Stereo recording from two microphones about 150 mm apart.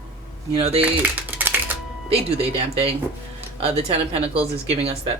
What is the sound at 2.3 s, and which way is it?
Speech, 40° right (ahead or behind).